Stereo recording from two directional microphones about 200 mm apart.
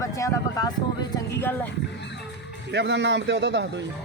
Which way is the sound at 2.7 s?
60° right (ahead or behind).